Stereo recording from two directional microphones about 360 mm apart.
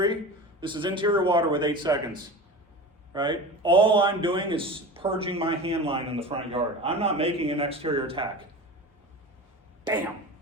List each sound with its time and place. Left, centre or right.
0.6 s a man's voice: centre
3.1 s a man's voice: centre
9.8 s a sound: centre